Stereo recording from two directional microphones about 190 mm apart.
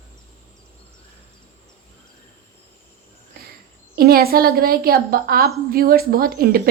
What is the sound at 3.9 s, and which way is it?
A woman's voice, 55° right (ahead or behind).